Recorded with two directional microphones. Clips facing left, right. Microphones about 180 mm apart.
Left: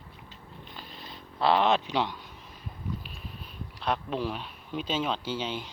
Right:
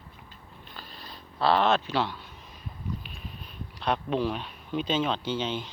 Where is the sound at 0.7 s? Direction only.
20° left (ahead or behind).